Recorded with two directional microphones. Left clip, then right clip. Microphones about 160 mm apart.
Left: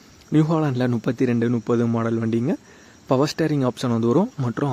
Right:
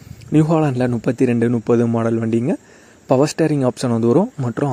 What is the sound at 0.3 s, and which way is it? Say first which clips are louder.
Speech: right 5 dB; 20° right (ahead or behind).